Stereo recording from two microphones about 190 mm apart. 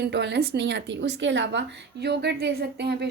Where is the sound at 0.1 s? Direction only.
65° right (ahead or behind).